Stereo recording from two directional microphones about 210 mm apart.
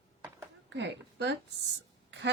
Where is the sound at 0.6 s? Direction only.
55° right (ahead or behind).